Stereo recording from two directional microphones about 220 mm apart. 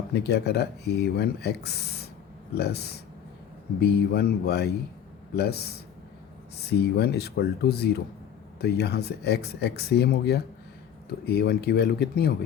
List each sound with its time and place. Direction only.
0.1 s speech: 50° left (ahead or behind)